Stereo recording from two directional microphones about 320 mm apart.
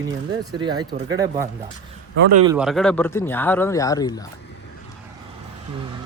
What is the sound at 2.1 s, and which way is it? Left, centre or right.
Speech, right.